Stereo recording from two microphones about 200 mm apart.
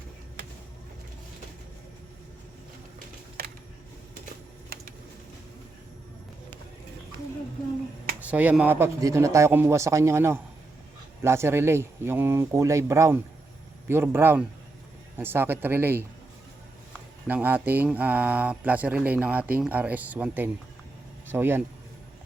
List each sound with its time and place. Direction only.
8.2 s speech: 5° right (ahead or behind)
17.2 s speech: 10° right (ahead or behind)